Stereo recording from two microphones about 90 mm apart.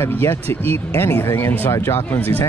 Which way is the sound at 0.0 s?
25° left (ahead or behind).